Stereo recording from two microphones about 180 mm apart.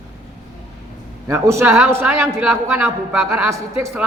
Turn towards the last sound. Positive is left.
turn(degrees=-15)  # may be behind; listen again after turning